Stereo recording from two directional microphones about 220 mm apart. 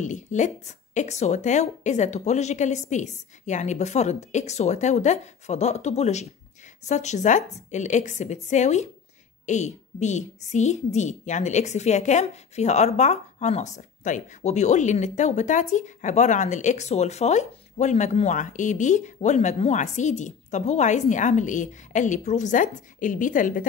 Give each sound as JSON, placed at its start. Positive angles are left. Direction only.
{"t": 0.0, "sound": "a woman's voice", "side_deg": 35}